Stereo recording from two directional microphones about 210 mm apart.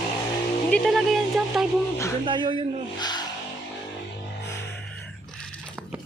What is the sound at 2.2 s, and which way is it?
Speech, 25° right (ahead or behind).